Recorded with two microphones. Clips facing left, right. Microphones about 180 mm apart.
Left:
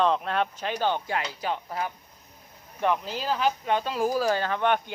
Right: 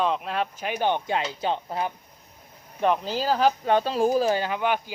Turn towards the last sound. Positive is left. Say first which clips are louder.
# left 1 dB
turn(degrees=-5)  # may be behind; listen again after turning